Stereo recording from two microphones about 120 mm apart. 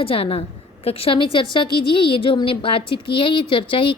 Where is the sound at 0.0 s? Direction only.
50° left (ahead or behind).